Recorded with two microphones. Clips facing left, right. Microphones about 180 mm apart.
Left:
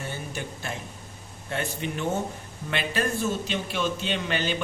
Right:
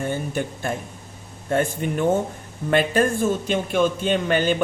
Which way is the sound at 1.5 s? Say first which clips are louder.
Right 8 dB; 50° right (ahead or behind).